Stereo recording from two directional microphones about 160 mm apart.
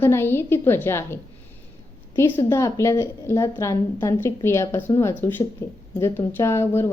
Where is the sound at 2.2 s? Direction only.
15° left (ahead or behind).